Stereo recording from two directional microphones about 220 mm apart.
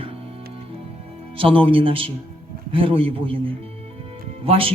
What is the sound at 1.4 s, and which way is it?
A man's voice, 25° right (ahead or behind).